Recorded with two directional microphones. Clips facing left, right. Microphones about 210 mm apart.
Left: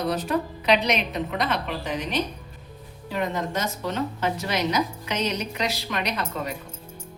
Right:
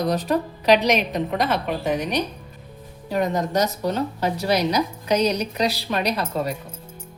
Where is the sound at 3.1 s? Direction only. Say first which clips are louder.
Right 5 dB; 40° right (ahead or behind).